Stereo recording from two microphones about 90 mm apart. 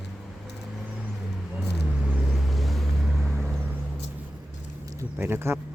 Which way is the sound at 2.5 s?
Centre (ahead or behind).